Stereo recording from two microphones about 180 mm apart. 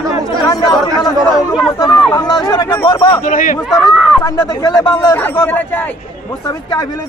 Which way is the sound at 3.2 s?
50° left (ahead or behind).